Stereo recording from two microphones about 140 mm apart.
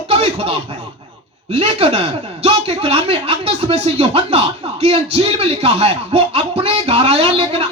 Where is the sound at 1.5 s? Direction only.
45° right (ahead or behind).